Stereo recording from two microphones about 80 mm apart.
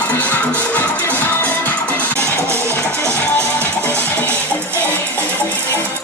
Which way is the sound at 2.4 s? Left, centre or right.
Right.